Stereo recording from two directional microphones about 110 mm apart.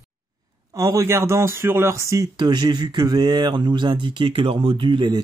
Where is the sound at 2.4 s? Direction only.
40° right (ahead or behind).